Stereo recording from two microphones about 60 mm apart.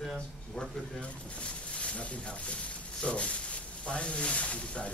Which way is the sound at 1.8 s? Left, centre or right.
Left.